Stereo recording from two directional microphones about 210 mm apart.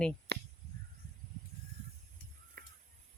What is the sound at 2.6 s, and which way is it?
Crow, 45° right (ahead or behind).